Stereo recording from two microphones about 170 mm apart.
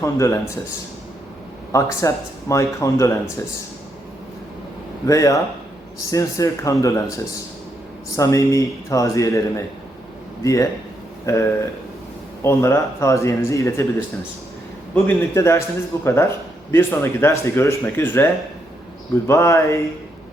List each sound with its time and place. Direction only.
0.0 s speech: 15° left (ahead or behind)
1.7 s speech: 20° left (ahead or behind)
5.0 s speech: 20° left (ahead or behind)
8.1 s speech: 20° left (ahead or behind)
15.0 s speech: 15° left (ahead or behind)
19.3 s speech: 15° left (ahead or behind)